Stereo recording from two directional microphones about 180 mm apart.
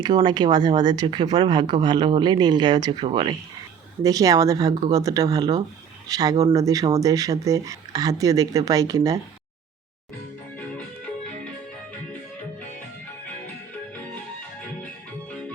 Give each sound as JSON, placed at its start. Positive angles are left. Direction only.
{"t": 0.0, "sound": "speech", "side_deg": -25}
{"t": 15.3, "sound": "music", "side_deg": 5}